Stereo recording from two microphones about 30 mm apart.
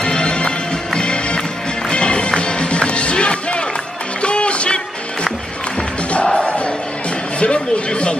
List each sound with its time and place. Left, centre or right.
0.0 s music: left
6.2 s crowd: left
7.3 s a sound: left